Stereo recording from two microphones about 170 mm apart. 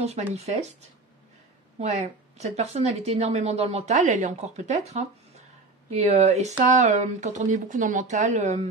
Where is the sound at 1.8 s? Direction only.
40° right (ahead or behind).